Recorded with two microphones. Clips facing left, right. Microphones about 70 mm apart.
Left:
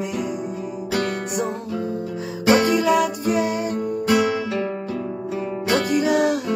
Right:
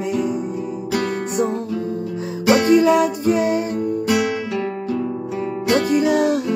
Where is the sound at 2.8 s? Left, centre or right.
Right.